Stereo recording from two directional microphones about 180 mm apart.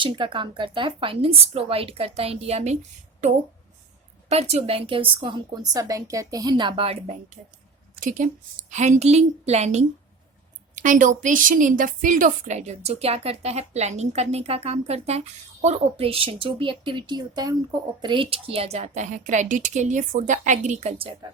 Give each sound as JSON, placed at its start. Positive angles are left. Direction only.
{"t": 0.0, "sound": "a woman's voice", "side_deg": -30}
{"t": 4.3, "sound": "a woman's voice", "side_deg": -35}